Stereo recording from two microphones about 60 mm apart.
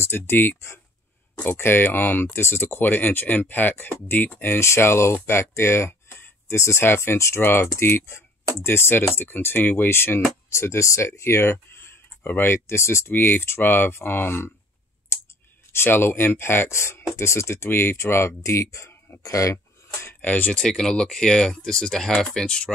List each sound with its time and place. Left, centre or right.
0.0 s speech: left
7.4 s speech: left
10.5 s speech: left
12.2 s speech: left
15.1 s clicking: left
15.7 s speech: left
17.6 s speech: left
19.2 s speech: left
20.2 s speech: left
20.6 s speech: centre